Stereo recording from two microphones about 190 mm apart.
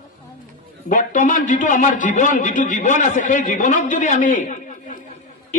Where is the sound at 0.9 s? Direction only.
45° left (ahead or behind).